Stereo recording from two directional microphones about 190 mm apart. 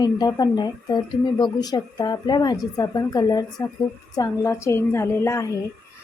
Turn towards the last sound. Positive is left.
turn(degrees=15)  # may be behind; listen again after turning